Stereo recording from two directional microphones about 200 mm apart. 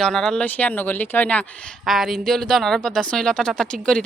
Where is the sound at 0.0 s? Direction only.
5° left (ahead or behind).